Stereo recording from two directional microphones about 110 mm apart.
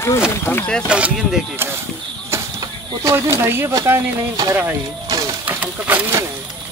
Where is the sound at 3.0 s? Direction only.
25° right (ahead or behind).